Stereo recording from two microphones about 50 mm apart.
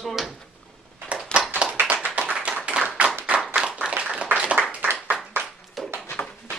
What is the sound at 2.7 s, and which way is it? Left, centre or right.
Tap, right.